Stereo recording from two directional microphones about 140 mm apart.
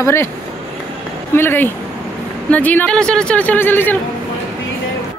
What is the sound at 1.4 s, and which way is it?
Speech, 15° left (ahead or behind).